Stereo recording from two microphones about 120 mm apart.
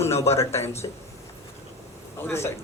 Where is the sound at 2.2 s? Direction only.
20° left (ahead or behind).